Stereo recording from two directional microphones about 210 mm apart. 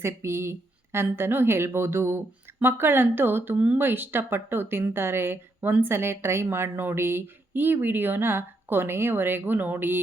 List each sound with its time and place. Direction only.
0.0 s speech: 10° right (ahead or behind)